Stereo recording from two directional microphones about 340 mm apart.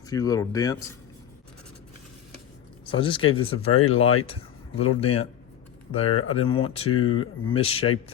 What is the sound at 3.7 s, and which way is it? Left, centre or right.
Speech, left.